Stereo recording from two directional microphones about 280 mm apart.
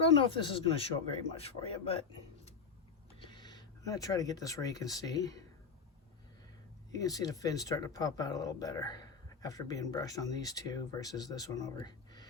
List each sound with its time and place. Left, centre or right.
0.2 s a man's voice: centre
3.2 s speech: centre
6.9 s speech: centre